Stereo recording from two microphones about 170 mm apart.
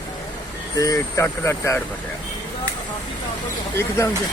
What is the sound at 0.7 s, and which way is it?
Speech, 20° left (ahead or behind).